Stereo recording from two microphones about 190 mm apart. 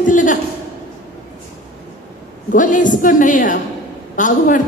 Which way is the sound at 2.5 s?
45° left (ahead or behind).